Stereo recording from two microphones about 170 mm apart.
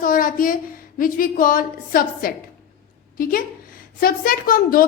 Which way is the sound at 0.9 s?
55° left (ahead or behind).